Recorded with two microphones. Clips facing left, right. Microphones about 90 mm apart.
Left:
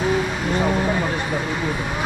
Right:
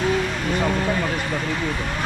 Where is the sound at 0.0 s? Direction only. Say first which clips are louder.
Left 1 dB; 10° left (ahead or behind).